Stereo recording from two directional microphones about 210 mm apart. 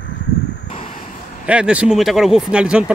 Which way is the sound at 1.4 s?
5° right (ahead or behind).